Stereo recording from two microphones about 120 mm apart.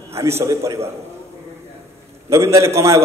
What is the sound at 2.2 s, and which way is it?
Speech, 25° right (ahead or behind).